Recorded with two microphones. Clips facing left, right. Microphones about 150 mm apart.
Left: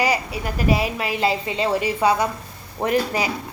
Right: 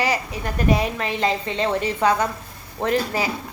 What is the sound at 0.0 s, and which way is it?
A woman's voice, 10° left (ahead or behind).